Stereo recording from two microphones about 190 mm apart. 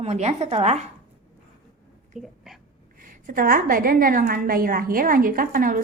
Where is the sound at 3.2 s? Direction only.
50° right (ahead or behind).